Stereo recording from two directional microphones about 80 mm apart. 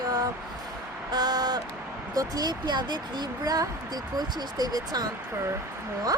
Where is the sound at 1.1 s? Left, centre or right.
Right.